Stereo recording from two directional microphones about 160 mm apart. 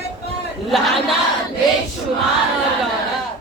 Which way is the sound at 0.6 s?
Centre (ahead or behind).